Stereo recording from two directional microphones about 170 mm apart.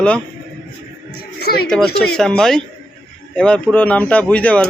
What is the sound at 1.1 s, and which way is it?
Music, 70° left (ahead or behind).